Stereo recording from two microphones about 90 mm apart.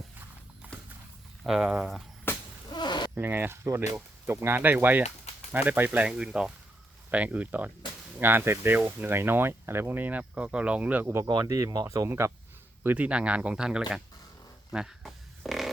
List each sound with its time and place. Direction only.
0.7 s horse: 10° left (ahead or behind)
1.5 s speech: 10° right (ahead or behind)
2.3 s a sound: 25° left (ahead or behind)
2.7 s a sound: 55° left (ahead or behind)
3.2 s speech: 25° right (ahead or behind)
11.4 s speech: 35° right (ahead or behind)
12.8 s speech: 20° right (ahead or behind)
14.7 s fart: 5° right (ahead or behind)